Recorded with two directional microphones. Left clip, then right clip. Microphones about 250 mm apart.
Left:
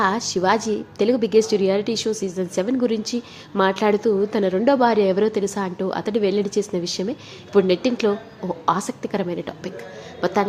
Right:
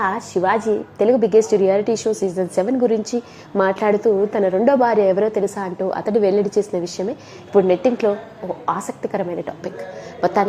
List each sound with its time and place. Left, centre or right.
0.0 s a woman's voice: centre
2.2 s a woman's voice: centre
2.6 s a woman's voice: centre
6.2 s a woman's voice: centre